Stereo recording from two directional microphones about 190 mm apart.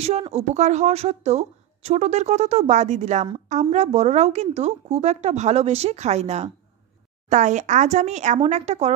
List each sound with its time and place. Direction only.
0.0 s speech: 35° right (ahead or behind)